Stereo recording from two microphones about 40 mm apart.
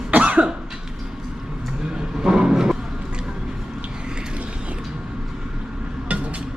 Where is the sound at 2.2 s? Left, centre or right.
Centre.